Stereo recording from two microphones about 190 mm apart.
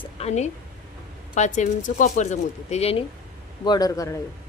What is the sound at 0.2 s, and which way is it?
Speech, 35° left (ahead or behind).